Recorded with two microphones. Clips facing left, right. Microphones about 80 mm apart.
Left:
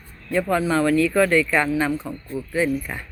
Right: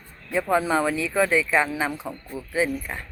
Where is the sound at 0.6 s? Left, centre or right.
Centre.